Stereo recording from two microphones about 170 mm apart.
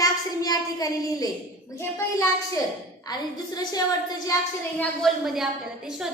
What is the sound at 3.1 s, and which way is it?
Speech, 25° left (ahead or behind).